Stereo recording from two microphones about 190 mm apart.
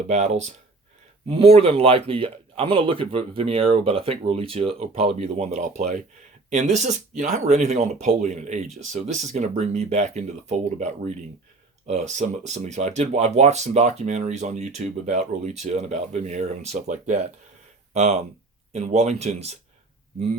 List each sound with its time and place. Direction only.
0.1 s speech: 35° right (ahead or behind)